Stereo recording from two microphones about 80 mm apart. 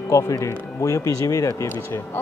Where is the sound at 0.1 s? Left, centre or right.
Left.